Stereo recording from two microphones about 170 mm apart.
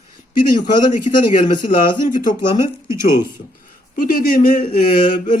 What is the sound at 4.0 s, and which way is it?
Speech, 55° left (ahead or behind).